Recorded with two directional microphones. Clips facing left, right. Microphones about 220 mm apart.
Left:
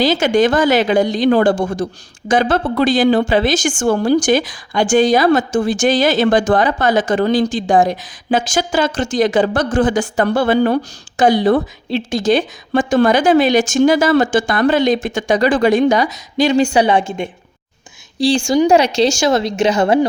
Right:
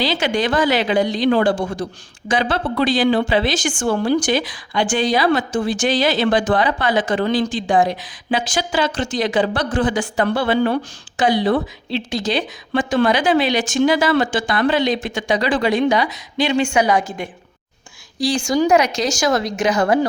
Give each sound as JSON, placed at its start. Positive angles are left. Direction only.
{"t": 0.0, "sound": "a woman's voice", "side_deg": 45}